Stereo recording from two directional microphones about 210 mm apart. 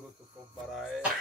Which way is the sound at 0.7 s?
Centre (ahead or behind).